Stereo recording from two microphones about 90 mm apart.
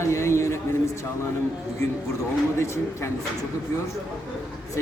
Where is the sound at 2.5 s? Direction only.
30° left (ahead or behind).